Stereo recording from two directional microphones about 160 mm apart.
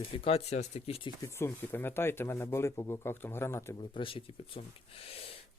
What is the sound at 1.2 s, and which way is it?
Speech, 15° left (ahead or behind).